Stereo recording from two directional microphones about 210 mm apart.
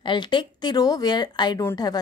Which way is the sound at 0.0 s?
20° left (ahead or behind).